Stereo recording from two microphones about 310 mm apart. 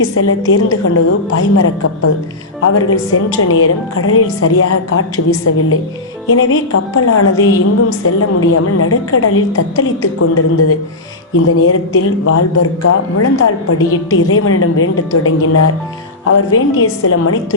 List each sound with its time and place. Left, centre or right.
0.0 s a woman's voice: left